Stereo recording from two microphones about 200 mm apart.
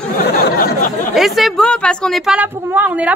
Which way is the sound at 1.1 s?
Centre (ahead or behind).